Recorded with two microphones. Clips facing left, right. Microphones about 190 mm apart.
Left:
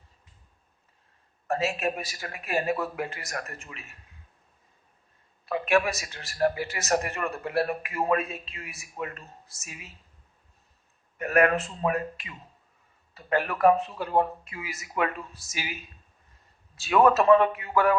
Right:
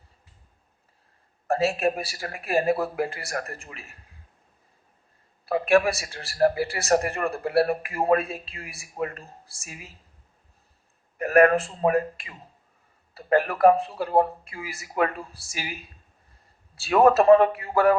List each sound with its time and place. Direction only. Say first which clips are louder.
1.5 s speech: right 5 dB; 35° right (ahead or behind)
5.5 s speech: right 4 dB; 35° right (ahead or behind)
11.2 s speech: right 5 dB; 35° right (ahead or behind)